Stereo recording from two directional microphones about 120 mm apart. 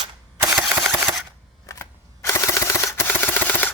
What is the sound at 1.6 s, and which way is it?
Camera, 25° left (ahead or behind).